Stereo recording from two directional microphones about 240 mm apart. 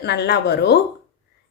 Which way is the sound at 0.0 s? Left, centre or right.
Left.